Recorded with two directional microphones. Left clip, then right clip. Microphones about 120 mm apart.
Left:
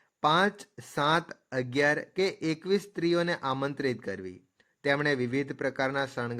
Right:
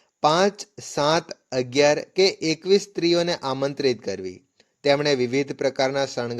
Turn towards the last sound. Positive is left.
turn(degrees=-30)  # may be behind; listen again after turning